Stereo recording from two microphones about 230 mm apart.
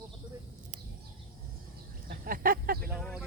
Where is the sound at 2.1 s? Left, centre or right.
Right.